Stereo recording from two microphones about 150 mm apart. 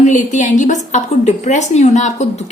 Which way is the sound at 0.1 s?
55° left (ahead or behind).